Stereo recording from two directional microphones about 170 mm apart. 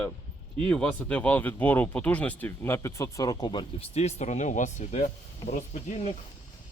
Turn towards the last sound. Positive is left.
turn(degrees=45)  # may be behind; listen again after turning